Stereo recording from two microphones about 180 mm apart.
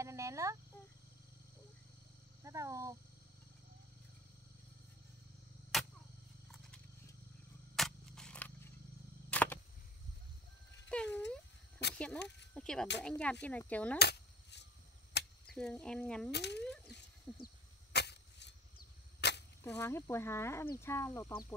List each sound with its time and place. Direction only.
0.0 s a sound: 15° right (ahead or behind)
2.4 s speech: 15° right (ahead or behind)
5.7 s arrow: centre (ahead or behind)
7.7 s a sound: centre (ahead or behind)
10.9 s a sound: 5° left (ahead or behind)
12.2 s speech: 70° left (ahead or behind)
12.5 s speech: 5° left (ahead or behind)
13.9 s cap gun: 70° left (ahead or behind)
15.4 s speech: 5° left (ahead or behind)
16.3 s speech: 70° left (ahead or behind)
16.6 s a sound: 5° left (ahead or behind)
17.9 s arrow: 70° left (ahead or behind)
19.6 s speech: 15° left (ahead or behind)